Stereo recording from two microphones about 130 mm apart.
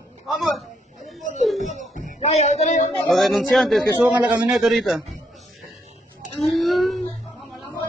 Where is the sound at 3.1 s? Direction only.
Centre (ahead or behind).